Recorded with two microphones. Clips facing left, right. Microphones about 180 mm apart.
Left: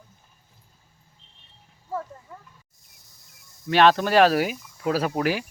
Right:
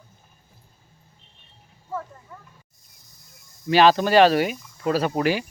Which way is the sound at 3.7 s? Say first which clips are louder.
Right 2 dB; centre (ahead or behind).